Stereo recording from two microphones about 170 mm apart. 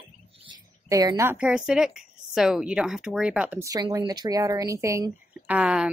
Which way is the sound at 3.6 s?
20° right (ahead or behind).